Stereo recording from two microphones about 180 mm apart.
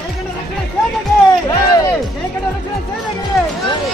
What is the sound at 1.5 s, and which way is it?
Speech, 20° left (ahead or behind).